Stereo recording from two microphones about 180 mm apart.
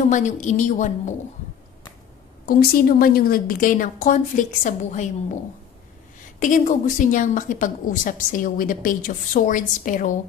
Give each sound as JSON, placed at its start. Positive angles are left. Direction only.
{"t": 0.1, "sound": "a woman's voice", "side_deg": 40}
{"t": 2.4, "sound": "a woman's voice", "side_deg": 55}
{"t": 6.4, "sound": "a woman's voice", "side_deg": 45}